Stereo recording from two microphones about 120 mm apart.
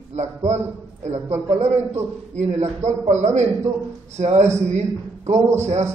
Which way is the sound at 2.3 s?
70° right (ahead or behind).